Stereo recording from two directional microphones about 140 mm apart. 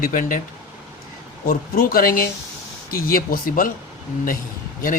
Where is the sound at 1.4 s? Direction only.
85° left.